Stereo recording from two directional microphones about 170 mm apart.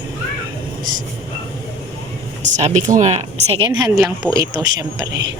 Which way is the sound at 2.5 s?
45° right (ahead or behind).